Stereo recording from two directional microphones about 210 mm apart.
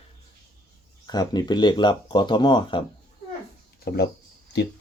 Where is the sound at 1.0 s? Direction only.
20° left (ahead or behind).